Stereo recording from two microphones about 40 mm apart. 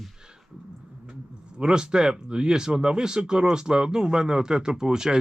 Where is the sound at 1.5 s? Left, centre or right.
Right.